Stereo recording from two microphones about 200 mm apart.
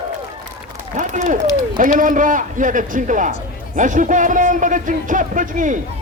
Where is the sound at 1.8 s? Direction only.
40° right (ahead or behind).